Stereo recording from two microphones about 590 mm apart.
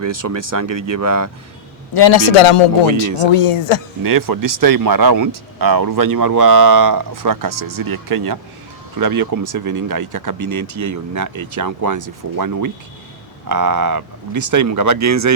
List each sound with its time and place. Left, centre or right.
0.0 s speech: right
1.9 s a man's voice: left
4.0 s speech: right